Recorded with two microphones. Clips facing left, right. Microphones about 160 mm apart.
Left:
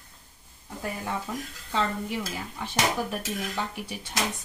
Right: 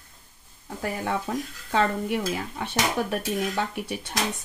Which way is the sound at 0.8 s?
75° right (ahead or behind).